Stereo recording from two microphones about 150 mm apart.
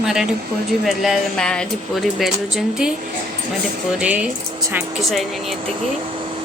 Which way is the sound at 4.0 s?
10° right (ahead or behind).